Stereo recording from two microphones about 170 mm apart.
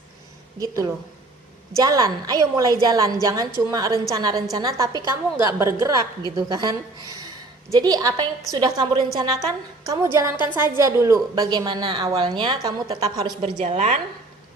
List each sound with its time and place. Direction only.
0.6 s a woman's voice: 20° right (ahead or behind)
13.6 s a woman's voice: 45° right (ahead or behind)